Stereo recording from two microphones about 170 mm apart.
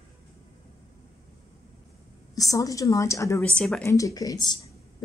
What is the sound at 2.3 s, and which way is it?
A woman's voice, 20° left (ahead or behind).